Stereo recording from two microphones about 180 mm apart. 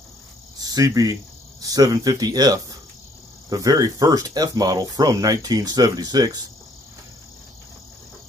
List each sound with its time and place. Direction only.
0.6 s cricket: 20° right (ahead or behind)
1.6 s speech: 20° right (ahead or behind)